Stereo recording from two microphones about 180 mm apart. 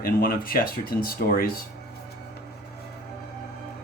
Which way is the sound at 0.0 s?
55° left (ahead or behind).